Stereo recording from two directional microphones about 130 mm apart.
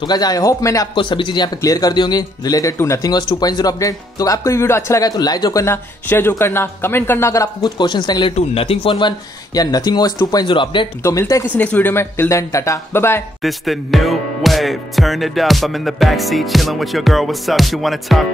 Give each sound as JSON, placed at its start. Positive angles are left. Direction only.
{"t": 0.0, "sound": "speech", "side_deg": 30}
{"t": 0.9, "sound": "speech", "side_deg": 40}
{"t": 7.6, "sound": "speech", "side_deg": 35}
{"t": 8.4, "sound": "speech", "side_deg": 45}
{"t": 11.0, "sound": "speech", "side_deg": 25}
{"t": 11.5, "sound": "speech", "side_deg": 10}
{"t": 13.4, "sound": "music", "side_deg": 0}